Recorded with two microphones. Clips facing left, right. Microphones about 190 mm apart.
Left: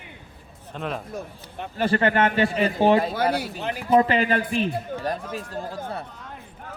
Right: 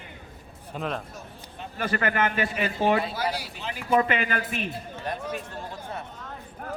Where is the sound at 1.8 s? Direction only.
30° left (ahead or behind).